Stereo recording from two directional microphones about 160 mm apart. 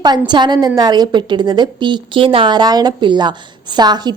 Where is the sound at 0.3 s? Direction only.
25° right (ahead or behind).